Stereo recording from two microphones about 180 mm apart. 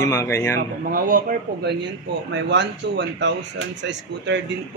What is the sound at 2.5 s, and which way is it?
Speech, 80° right.